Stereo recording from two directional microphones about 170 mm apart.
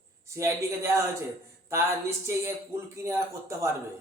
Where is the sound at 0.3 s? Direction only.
15° right (ahead or behind).